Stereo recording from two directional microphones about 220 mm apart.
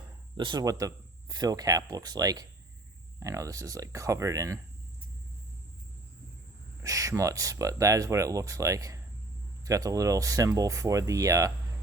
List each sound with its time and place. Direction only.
0.3 s speech: 20° right (ahead or behind)
6.8 s speech: 15° right (ahead or behind)